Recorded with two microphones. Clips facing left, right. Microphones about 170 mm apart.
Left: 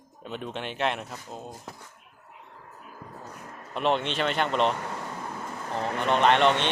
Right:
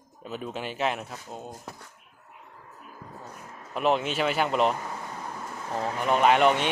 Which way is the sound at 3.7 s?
5° right (ahead or behind).